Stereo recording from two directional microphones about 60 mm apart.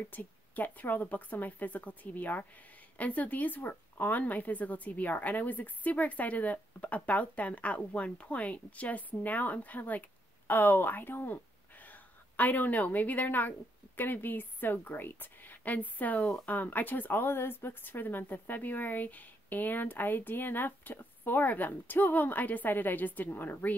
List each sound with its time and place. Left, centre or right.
0.1 s a woman's voice: left